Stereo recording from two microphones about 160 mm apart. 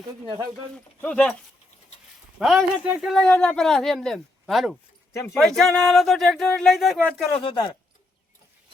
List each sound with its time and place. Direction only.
1.0 s speech: 10° left (ahead or behind)
2.4 s a man's voice: centre (ahead or behind)
7.4 s speech: 25° left (ahead or behind)